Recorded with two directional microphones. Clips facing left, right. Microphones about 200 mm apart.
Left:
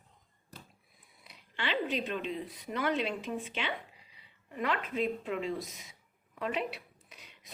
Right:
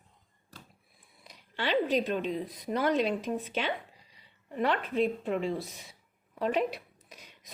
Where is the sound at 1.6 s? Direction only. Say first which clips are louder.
Right 6 dB; 40° right (ahead or behind).